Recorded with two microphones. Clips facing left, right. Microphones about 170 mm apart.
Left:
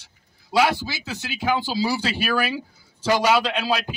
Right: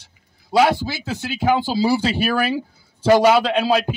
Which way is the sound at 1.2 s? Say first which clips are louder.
Right 5 dB; 50° right (ahead or behind).